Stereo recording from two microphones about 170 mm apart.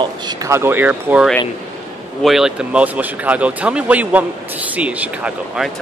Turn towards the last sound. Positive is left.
turn(degrees=-5)  # may be behind; listen again after turning